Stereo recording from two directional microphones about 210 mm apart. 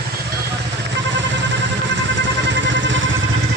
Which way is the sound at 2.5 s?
60° right (ahead or behind).